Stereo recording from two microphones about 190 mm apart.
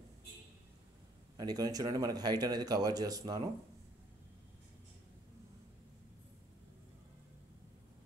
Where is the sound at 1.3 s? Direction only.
20° right (ahead or behind).